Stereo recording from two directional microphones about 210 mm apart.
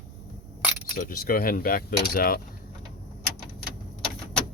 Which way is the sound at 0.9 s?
40° left (ahead or behind).